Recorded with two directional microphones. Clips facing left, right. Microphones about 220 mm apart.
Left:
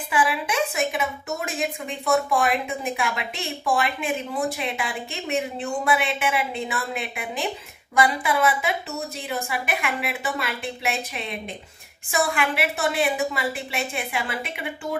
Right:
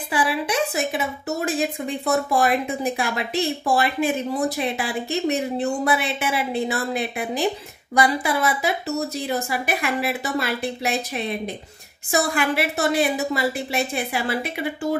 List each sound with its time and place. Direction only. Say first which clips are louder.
0.1 s a woman's voice: right 1 dB; 35° right (ahead or behind)